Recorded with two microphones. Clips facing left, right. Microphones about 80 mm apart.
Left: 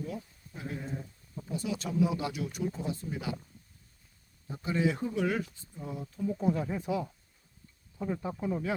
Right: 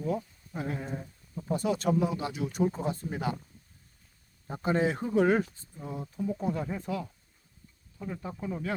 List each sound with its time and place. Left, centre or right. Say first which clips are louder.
0.0 s speech: right 7 dB; right
0.5 s speech: right 4 dB; right
1.5 s speech: right 7 dB; right
2.1 s speech: right 3 dB; right
4.4 s speech: right 2 dB; right
5.8 s speech: right 1 dB; right
6.1 s speech: left 2 dB; centre
7.9 s speech: left 4 dB; centre